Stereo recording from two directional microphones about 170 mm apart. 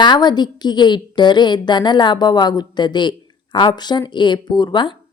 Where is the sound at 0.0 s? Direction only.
25° left (ahead or behind).